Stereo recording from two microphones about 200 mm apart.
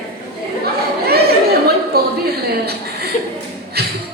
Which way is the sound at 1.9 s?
50° right (ahead or behind).